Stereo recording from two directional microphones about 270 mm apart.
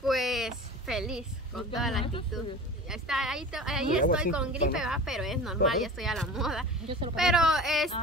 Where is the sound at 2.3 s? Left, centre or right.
Centre.